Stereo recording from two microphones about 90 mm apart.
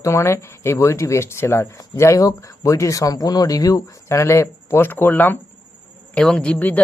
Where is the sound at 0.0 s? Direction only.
30° left (ahead or behind).